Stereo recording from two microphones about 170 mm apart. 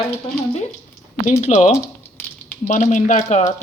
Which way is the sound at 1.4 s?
40° left (ahead or behind).